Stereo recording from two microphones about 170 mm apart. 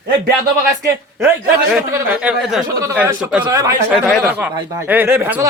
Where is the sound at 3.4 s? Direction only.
20° right (ahead or behind).